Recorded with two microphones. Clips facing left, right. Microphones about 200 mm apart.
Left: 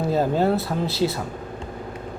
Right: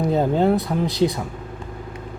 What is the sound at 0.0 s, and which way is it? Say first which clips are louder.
Speech: right 2 dB; 20° right (ahead or behind).